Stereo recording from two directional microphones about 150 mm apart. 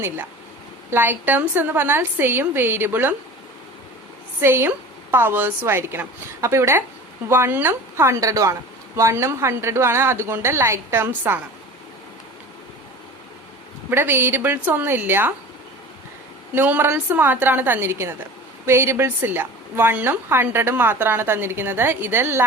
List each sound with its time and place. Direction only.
0.9 s a woman's voice: 15° right (ahead or behind)
4.4 s a woman's voice: 15° right (ahead or behind)
13.9 s a woman's voice: 15° right (ahead or behind)
16.6 s a woman's voice: 15° right (ahead or behind)